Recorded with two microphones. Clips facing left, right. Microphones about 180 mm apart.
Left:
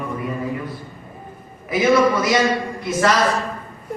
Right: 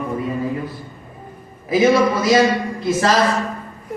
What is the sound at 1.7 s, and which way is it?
A man's voice, 25° right (ahead or behind).